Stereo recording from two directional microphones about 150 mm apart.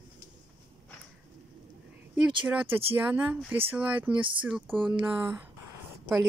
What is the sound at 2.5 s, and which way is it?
Speech, 10° right (ahead or behind).